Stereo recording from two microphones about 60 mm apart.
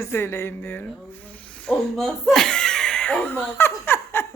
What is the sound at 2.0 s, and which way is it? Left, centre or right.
Speech, centre.